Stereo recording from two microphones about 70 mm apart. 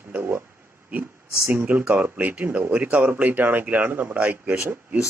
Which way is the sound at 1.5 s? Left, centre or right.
Right.